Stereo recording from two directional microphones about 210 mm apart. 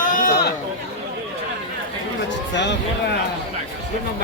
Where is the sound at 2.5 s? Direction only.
55° left (ahead or behind).